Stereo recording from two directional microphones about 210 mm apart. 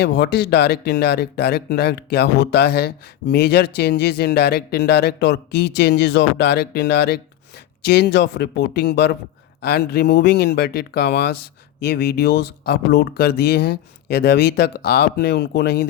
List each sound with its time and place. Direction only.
0.0 s speech: 55° left (ahead or behind)